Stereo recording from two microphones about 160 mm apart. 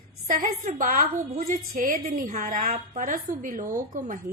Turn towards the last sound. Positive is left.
turn(degrees=-55)  # may be behind; listen again after turning